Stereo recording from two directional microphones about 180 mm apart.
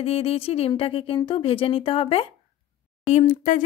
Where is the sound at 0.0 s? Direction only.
30° left (ahead or behind).